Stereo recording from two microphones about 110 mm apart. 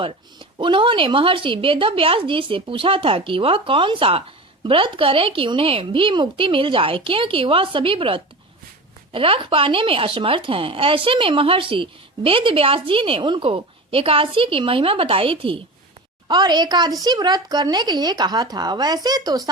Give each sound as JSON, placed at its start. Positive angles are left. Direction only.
{"t": 0.0, "sound": "speech", "side_deg": -50}
{"t": 16.3, "sound": "a woman's voice", "side_deg": -40}